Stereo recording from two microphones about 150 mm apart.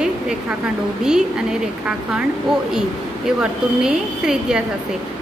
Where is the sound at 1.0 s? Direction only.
5° right (ahead or behind).